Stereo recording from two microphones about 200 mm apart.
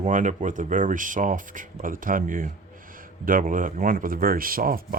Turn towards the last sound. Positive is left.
turn(degrees=-45)  # may be behind; listen again after turning